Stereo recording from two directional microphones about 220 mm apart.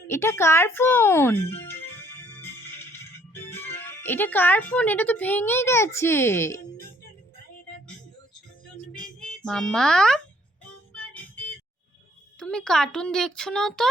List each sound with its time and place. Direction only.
0.1 s music: 10° left (ahead or behind)
3.5 s speech: 10° left (ahead or behind)
8.9 s music: 5° left (ahead or behind)
12.4 s speech: 5° left (ahead or behind)